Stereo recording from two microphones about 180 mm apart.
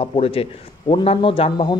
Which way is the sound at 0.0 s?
30° left (ahead or behind).